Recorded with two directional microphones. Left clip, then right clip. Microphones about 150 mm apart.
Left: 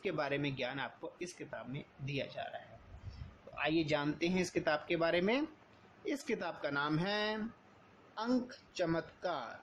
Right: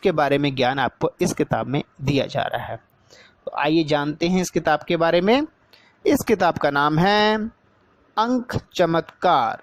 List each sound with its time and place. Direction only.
0.0 s speech: 75° right (ahead or behind)
3.5 s speech: 70° right (ahead or behind); by 7.4 s 90° right
8.3 s speech: 65° right (ahead or behind)